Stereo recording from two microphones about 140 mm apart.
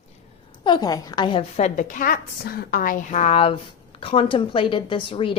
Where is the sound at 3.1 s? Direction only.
50° left (ahead or behind).